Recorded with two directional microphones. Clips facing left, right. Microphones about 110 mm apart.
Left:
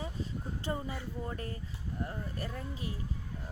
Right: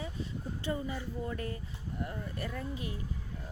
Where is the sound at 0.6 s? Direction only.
35° left (ahead or behind).